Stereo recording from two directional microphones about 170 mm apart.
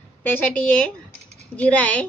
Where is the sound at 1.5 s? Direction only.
10° left (ahead or behind).